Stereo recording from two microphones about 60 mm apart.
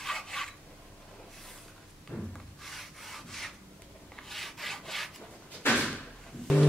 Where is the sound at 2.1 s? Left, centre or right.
Left.